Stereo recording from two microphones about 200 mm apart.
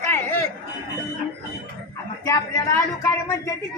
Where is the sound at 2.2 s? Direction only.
15° left (ahead or behind).